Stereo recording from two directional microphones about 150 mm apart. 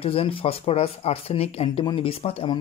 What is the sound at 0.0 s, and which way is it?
Speech, 40° left (ahead or behind).